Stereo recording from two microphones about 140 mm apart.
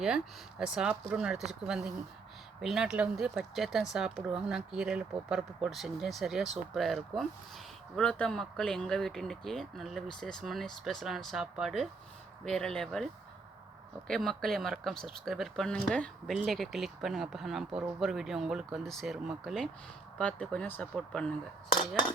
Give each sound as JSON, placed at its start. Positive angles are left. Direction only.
{"t": 0.6, "sound": "speech", "side_deg": -5}
{"t": 14.1, "sound": "speech", "side_deg": 5}